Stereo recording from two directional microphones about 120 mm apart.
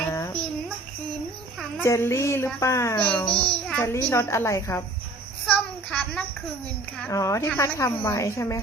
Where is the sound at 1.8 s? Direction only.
20° left (ahead or behind).